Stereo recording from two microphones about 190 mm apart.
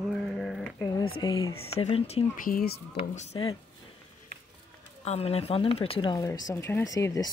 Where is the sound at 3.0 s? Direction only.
40° left (ahead or behind).